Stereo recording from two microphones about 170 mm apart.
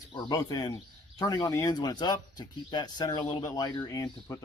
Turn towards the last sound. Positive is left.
turn(degrees=20)  # may be behind; listen again after turning